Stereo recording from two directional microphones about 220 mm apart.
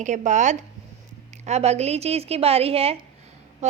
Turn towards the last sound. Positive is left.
turn(degrees=-30)  # may be behind; listen again after turning